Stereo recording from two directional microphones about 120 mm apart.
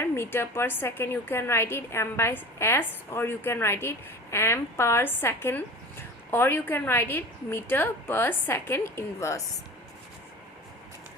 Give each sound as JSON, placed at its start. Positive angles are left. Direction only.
{"t": 0.0, "sound": "a woman's voice", "side_deg": 20}